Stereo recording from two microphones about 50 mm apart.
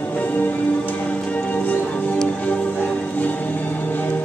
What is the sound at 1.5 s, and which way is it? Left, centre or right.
Music, left.